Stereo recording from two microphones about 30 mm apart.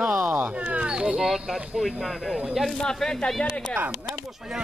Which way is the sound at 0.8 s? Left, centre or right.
Right.